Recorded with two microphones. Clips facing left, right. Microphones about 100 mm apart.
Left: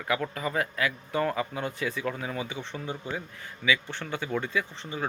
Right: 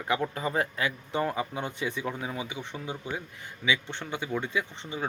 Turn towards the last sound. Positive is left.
turn(degrees=-20)  # may be behind; listen again after turning